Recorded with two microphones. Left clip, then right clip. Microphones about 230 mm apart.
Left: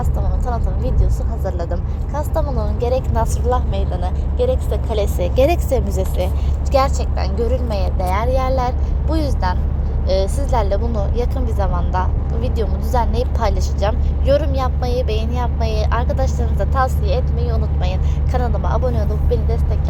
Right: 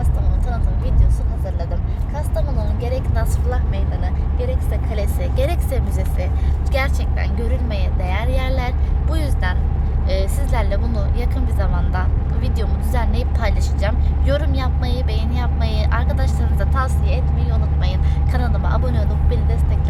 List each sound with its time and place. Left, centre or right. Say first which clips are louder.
2.1 s vehicle: left 5 dB; centre
5.2 s speech: left 9 dB; centre